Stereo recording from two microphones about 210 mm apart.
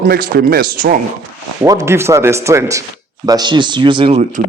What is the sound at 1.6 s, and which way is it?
Speech, 15° right (ahead or behind).